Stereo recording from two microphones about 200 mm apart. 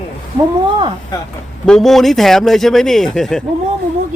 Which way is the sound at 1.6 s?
Centre (ahead or behind).